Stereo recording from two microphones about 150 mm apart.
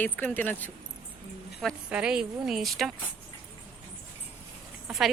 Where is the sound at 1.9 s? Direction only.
5° right (ahead or behind).